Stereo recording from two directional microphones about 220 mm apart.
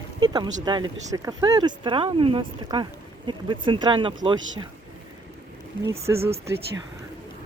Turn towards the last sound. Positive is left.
turn(degrees=-25)  # may be behind; listen again after turning